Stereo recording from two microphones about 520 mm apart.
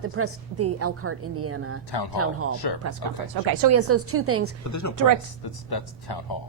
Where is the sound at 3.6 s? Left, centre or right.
Right.